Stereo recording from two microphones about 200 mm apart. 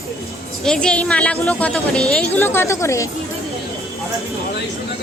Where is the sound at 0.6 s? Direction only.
5° left (ahead or behind).